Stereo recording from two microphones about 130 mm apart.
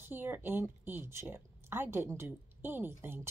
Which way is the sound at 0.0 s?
15° right (ahead or behind).